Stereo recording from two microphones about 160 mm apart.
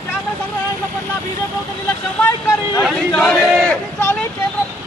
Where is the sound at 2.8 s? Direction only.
Centre (ahead or behind).